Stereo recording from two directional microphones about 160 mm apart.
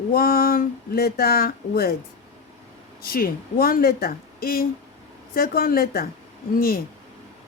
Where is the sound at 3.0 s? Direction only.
65° left (ahead or behind).